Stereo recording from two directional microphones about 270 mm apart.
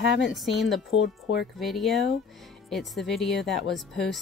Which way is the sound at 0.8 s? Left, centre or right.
Left.